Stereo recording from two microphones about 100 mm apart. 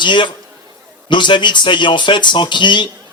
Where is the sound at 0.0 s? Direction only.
50° left (ahead or behind).